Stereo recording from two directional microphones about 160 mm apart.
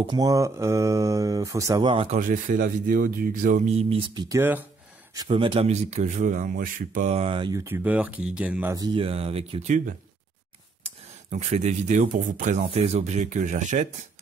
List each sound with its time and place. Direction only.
0.0 s speech: 25° right (ahead or behind)
1.9 s speech: 35° right (ahead or behind)
2.1 s speech: 55° right (ahead or behind)
3.6 s speech: 40° right (ahead or behind)
4.1 s speech: 25° right (ahead or behind)
4.4 s speech: 10° right (ahead or behind)
5.3 s speech: 35° right (ahead or behind)
5.7 s speech: 45° right (ahead or behind)
7.5 s speech: 15° right (ahead or behind)
8.7 s speech: 30° right (ahead or behind); by 9.9 s 45° right (ahead or behind)
11.2 s speech: 45° right (ahead or behind)
12.6 s speech: 40° right (ahead or behind)